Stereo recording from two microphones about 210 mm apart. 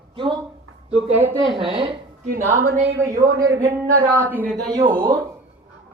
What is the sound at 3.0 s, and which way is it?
Speech, 15° right (ahead or behind).